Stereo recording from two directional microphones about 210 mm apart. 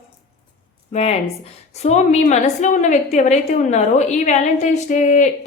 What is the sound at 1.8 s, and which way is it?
A woman's voice, 35° left (ahead or behind).